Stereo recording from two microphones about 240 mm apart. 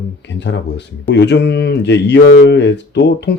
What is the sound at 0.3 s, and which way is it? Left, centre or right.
Speech, left.